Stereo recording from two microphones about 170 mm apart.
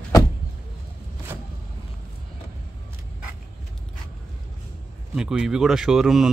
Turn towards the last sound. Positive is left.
turn(degrees=0)  # may be behind; listen again after turning